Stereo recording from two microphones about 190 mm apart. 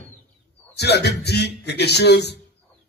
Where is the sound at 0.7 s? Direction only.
60° left (ahead or behind).